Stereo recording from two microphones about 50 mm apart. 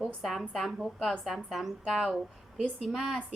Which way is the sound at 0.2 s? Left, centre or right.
Centre.